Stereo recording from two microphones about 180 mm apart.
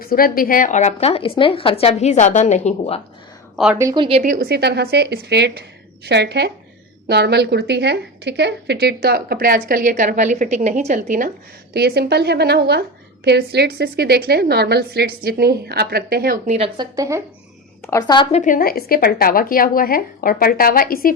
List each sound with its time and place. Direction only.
0.0 s a woman's voice: 55° left (ahead or behind); by 3.0 s 35° left (ahead or behind)
3.5 s a woman's voice: 5° right (ahead or behind)
3.8 s speech: 20° right (ahead or behind)
4.2 s a woman's voice: 50° right (ahead or behind)
11.7 s a woman's voice: 65° right (ahead or behind)
16.5 s speech: 30° right (ahead or behind)
17.8 s a woman's voice: 20° left (ahead or behind)
18.3 s a woman's voice: 40° left (ahead or behind)